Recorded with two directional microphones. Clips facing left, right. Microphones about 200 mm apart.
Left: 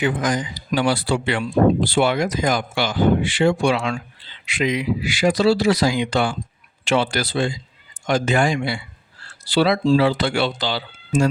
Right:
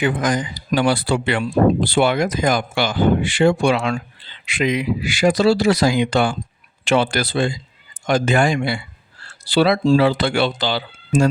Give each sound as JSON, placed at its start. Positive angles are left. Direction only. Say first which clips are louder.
{"t": 0.0, "sound": "speech", "louder": "right 2 dB", "side_deg": -55}